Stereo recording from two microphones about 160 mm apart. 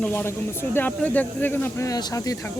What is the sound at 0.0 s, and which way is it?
Speech, 10° left (ahead or behind).